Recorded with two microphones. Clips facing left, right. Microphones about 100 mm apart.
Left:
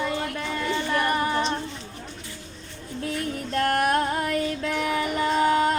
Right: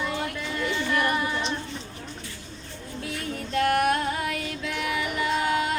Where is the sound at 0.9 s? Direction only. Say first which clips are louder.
Left 3 dB; 40° left (ahead or behind).